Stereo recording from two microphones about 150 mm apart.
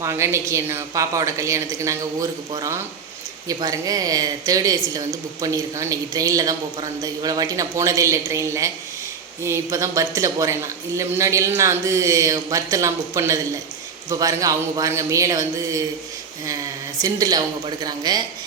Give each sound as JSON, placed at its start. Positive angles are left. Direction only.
{"t": 0.0, "sound": "speech", "side_deg": -20}
{"t": 17.0, "sound": "speech", "side_deg": -25}